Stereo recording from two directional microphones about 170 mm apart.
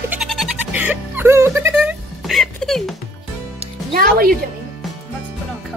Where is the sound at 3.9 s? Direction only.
60° right (ahead or behind).